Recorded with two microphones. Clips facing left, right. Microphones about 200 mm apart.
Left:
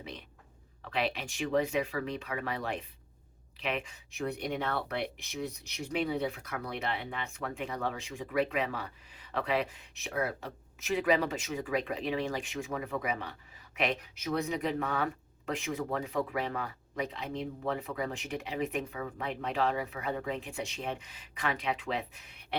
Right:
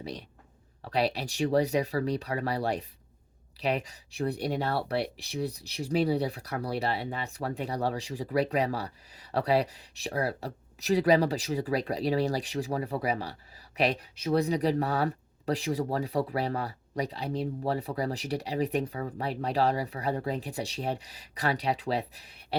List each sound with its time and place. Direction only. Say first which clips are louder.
0.0 s speech: right 6 dB; 35° right (ahead or behind)